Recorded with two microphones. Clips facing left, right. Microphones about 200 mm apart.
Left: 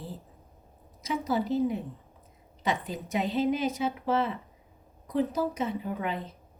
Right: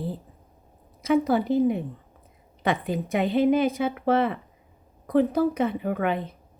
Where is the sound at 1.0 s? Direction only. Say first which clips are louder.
Right 8 dB; 60° right (ahead or behind).